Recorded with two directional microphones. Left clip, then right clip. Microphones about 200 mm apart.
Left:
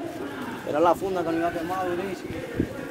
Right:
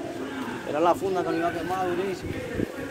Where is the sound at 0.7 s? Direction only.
45° left (ahead or behind).